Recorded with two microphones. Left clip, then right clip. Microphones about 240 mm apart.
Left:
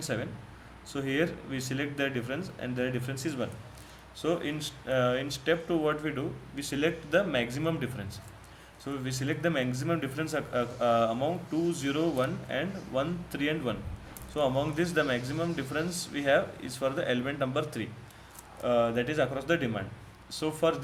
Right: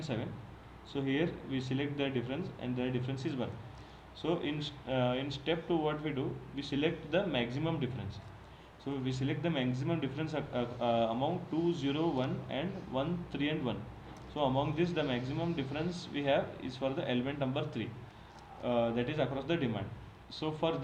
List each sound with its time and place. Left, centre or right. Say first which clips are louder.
0.0 s speech: left 5 dB; left